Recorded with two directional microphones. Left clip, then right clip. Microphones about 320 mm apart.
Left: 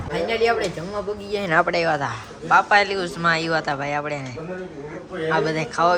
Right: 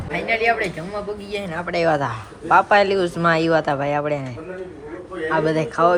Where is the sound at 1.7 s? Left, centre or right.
Centre.